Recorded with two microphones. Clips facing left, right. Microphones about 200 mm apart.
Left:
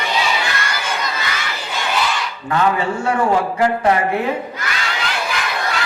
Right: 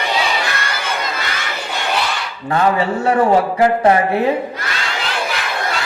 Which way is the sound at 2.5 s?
30° right (ahead or behind).